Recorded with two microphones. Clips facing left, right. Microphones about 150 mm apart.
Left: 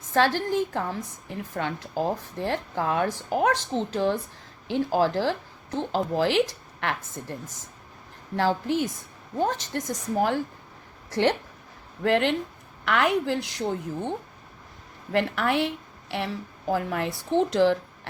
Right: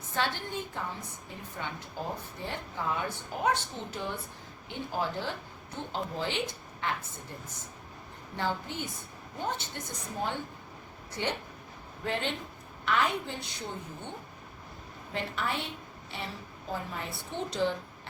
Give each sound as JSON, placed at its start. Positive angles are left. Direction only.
{"t": 0.1, "sound": "a woman's voice", "side_deg": 90}
{"t": 8.4, "sound": "a woman's voice", "side_deg": 90}
{"t": 15.1, "sound": "a woman's voice", "side_deg": 75}